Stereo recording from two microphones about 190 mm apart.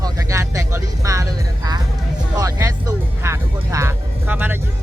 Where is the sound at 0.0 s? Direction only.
15° right (ahead or behind).